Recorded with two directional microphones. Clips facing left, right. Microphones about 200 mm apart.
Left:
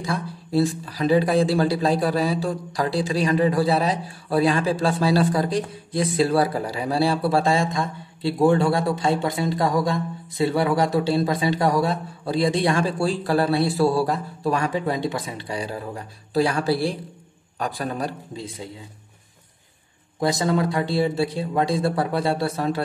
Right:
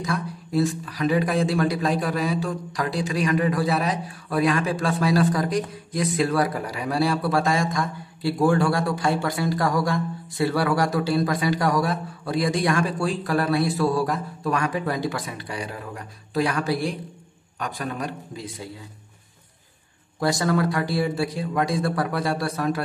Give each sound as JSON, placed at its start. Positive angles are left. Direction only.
{"t": 0.0, "sound": "a man's voice", "side_deg": 30}
{"t": 20.2, "sound": "speech", "side_deg": 20}